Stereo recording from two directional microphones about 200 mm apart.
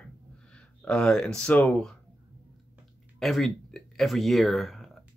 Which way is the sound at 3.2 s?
Centre (ahead or behind).